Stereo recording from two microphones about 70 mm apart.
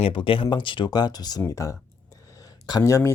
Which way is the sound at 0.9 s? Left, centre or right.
Left.